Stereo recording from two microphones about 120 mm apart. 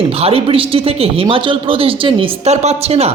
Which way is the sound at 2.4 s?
65° right (ahead or behind).